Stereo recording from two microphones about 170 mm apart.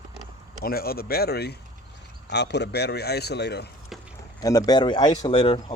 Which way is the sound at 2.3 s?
90° left.